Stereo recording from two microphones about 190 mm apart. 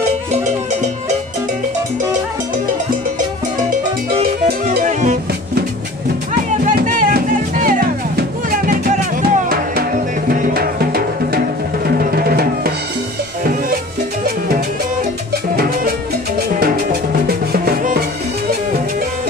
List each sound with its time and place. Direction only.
4.7 s music: 40° right (ahead or behind)
6.6 s music: 45° right (ahead or behind)
12.0 s drum: 50° right (ahead or behind)
13.4 s music: 50° right (ahead or behind)
17.3 s music: 55° right (ahead or behind)